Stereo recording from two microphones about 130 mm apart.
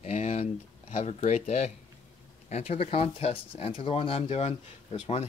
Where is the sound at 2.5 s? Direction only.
50° left (ahead or behind).